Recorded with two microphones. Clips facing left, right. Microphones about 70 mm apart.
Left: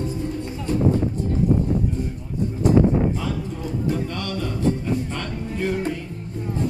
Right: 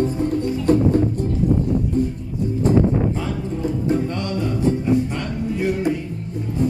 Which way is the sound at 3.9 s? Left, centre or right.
Right.